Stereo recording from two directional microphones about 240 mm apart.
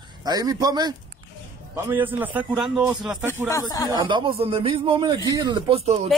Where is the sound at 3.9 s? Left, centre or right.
Centre.